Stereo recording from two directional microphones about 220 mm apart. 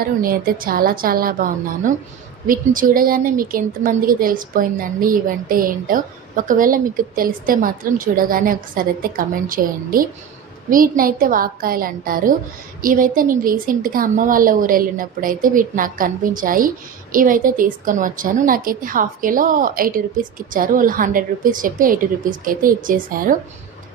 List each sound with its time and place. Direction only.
0.0 s speech: 40° right (ahead or behind)